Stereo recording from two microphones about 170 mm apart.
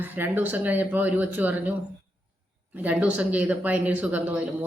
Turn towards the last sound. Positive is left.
turn(degrees=-10)  # may be behind; listen again after turning